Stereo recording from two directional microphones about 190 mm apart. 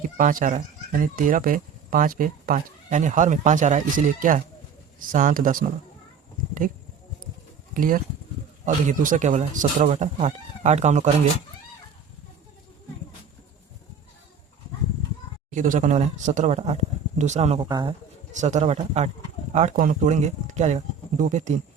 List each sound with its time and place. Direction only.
0.2 s speech: 45° right (ahead or behind)
7.7 s speech: 45° right (ahead or behind)
15.4 s speech: 40° right (ahead or behind)
17.7 s speech: 20° right (ahead or behind)
18.3 s speech: 35° right (ahead or behind)